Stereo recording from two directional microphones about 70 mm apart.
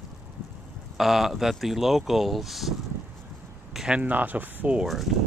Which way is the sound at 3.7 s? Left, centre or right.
Centre.